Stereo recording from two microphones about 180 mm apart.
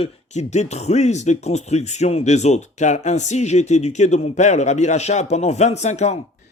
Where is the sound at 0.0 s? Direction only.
40° left (ahead or behind).